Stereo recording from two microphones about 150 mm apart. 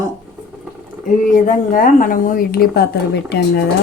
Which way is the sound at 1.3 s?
60° left (ahead or behind).